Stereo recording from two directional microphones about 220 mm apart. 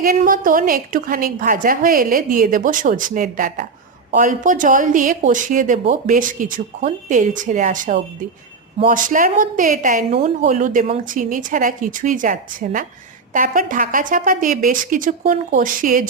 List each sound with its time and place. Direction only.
0.0 s speech: 40° right (ahead or behind)